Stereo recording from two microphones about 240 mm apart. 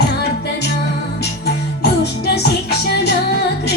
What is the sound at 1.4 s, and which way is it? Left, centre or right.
Music, left.